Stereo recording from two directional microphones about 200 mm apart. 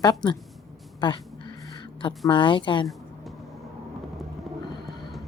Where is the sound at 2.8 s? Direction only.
Centre (ahead or behind).